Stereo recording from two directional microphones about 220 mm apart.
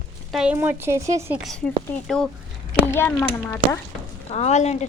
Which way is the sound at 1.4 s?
5° left (ahead or behind).